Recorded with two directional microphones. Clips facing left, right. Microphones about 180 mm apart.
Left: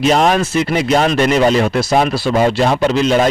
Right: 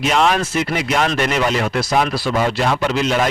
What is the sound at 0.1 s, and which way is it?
Speech, 40° left (ahead or behind).